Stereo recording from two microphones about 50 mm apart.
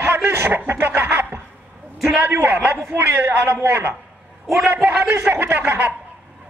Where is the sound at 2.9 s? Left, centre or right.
Right.